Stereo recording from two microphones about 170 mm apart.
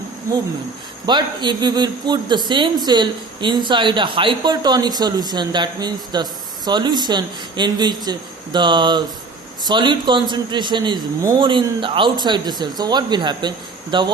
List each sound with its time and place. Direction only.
1.0 s speech: 25° right (ahead or behind)